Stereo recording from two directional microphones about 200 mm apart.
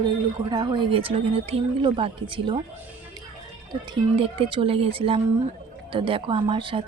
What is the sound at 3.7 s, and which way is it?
A woman's voice, 25° right (ahead or behind).